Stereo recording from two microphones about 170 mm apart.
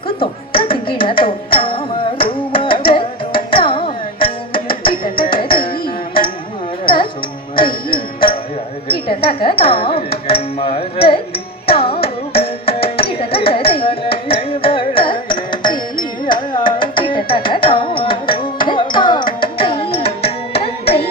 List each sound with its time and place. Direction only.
0.2 s music: 30° left (ahead or behind)
5.0 s music: 60° left (ahead or behind)
6.8 s music: 30° left (ahead or behind)
8.9 s music: 30° left (ahead or behind)
10.1 s music: 65° left (ahead or behind)
10.6 s a sound: 35° left (ahead or behind)
11.7 s carnatic music: 35° left (ahead or behind)
12.4 s music: 35° left (ahead or behind)
13.1 s carnatic music: 35° left (ahead or behind)